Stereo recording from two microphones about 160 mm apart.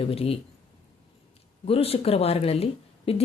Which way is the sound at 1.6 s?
35° left (ahead or behind).